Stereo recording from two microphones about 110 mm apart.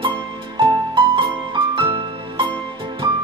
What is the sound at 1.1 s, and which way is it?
Music, 50° right (ahead or behind).